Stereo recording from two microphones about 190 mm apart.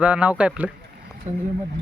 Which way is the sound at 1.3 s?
40° right (ahead or behind).